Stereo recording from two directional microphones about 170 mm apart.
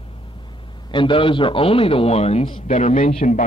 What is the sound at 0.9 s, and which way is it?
A man's voice, 30° left (ahead or behind).